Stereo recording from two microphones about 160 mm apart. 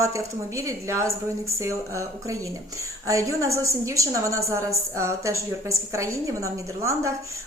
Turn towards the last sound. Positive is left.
turn(degrees=-20)  # may be behind; listen again after turning